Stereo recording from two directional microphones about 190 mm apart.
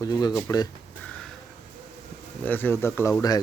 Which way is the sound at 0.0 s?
20° left (ahead or behind).